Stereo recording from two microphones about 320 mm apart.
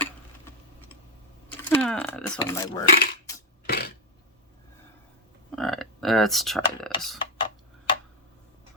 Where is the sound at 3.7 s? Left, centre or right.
Left.